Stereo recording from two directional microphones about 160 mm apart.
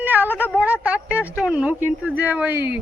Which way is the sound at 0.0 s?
10° right (ahead or behind).